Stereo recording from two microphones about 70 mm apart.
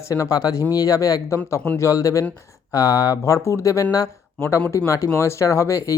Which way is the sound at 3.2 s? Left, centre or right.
Left.